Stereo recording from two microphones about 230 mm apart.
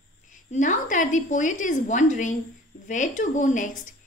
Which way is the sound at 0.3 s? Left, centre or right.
Left.